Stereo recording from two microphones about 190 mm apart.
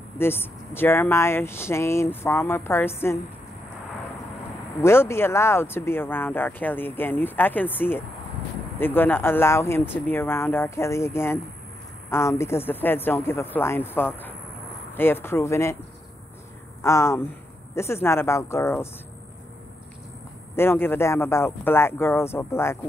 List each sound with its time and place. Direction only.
0.2 s speech: 10° left (ahead or behind)
4.8 s speech: 15° left (ahead or behind)
16.8 s speech: 15° left (ahead or behind)
20.5 s speech: 10° left (ahead or behind)